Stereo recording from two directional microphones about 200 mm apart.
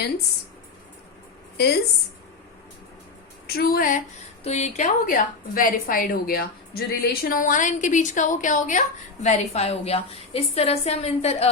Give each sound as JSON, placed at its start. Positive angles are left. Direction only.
{"t": 1.5, "sound": "a woman's voice", "side_deg": 55}
{"t": 3.4, "sound": "a woman's voice", "side_deg": 50}